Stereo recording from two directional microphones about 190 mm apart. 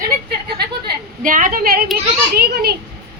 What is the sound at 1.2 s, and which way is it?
A woman's voice, 45° right (ahead or behind).